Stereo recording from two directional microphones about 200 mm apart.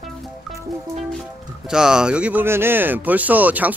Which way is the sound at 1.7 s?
5° right (ahead or behind).